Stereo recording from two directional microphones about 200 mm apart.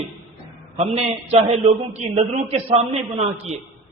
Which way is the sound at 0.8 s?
30° right (ahead or behind).